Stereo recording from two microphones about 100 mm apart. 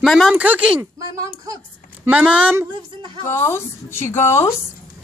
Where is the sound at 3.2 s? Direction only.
25° left (ahead or behind).